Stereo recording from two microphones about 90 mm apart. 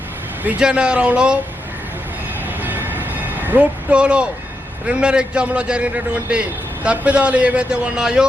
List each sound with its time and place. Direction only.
0.4 s a man's voice: 10° right (ahead or behind)
2.6 s a sound: 20° right (ahead or behind)
4.9 s a man's voice: 10° right (ahead or behind)